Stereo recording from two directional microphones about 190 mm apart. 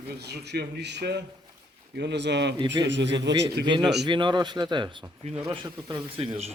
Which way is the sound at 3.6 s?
25° right (ahead or behind).